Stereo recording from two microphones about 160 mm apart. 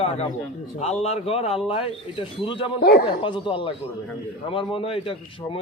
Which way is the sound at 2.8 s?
85° left.